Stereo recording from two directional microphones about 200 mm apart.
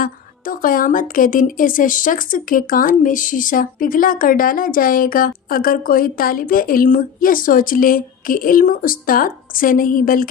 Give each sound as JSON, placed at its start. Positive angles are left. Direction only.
{"t": 0.0, "sound": "a woman's voice", "side_deg": 45}